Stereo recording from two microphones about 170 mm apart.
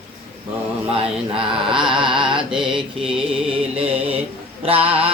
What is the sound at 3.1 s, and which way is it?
Music, 35° right (ahead or behind).